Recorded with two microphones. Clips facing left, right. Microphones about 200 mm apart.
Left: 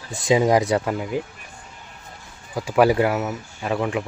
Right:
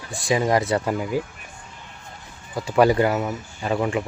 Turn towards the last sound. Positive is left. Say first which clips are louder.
# right 1 dB
turn(degrees=0)  # may be behind; listen again after turning